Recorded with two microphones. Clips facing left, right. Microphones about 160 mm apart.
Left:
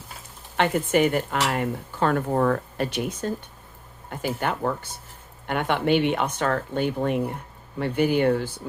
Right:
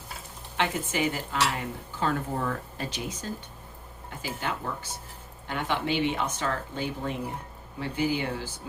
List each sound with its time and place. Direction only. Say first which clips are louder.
0.5 s speech: left 8 dB; 55° left (ahead or behind)